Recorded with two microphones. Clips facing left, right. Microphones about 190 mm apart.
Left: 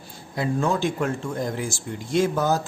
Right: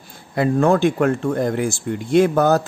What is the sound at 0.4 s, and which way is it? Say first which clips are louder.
Speech: right 8 dB; 60° right (ahead or behind).